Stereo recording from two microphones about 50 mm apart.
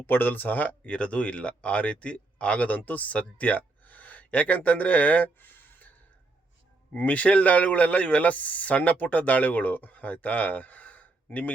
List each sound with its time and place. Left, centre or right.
0.0 s speech: left
6.9 s a man's voice: left